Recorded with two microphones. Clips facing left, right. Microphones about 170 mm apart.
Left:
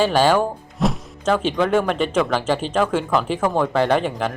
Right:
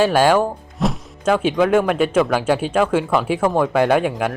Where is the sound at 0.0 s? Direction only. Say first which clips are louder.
Right 2 dB; 5° right (ahead or behind).